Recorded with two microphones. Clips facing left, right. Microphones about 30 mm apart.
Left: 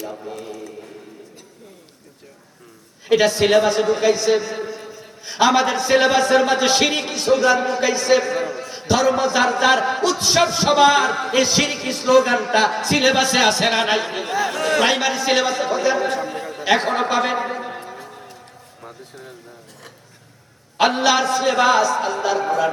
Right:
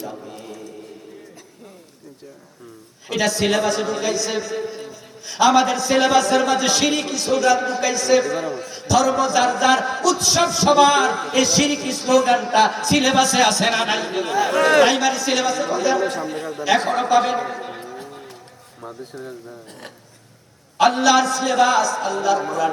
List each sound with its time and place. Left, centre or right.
0.2 s a man's voice: centre
3.1 s a man's voice: left
12.2 s a man's voice: centre
12.7 s a man's voice: left
17.6 s a sound: centre
20.7 s a man's voice: left